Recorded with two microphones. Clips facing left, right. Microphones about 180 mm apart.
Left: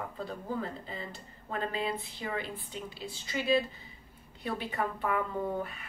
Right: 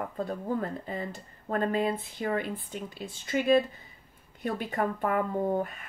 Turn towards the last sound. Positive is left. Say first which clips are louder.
# right 5 dB
turn(degrees=-45)  # may be behind; listen again after turning